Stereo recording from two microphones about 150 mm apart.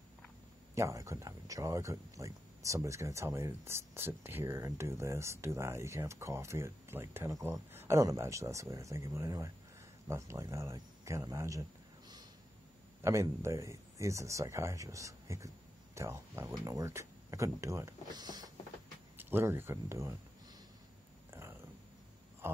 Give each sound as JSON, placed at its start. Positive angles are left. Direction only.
{"t": 0.7, "sound": "speech", "side_deg": -20}
{"t": 13.0, "sound": "speech", "side_deg": -20}
{"t": 19.1, "sound": "speech", "side_deg": -15}